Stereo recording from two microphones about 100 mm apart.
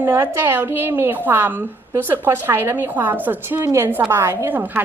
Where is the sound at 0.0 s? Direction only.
20° right (ahead or behind).